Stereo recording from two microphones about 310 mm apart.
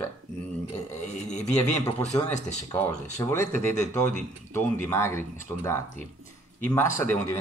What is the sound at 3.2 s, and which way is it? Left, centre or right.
Speech, centre.